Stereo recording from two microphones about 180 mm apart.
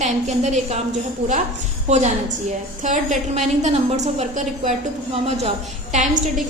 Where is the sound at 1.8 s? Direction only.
40° right (ahead or behind).